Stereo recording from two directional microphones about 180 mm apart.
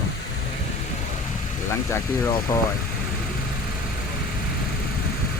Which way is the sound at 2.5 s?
15° left (ahead or behind).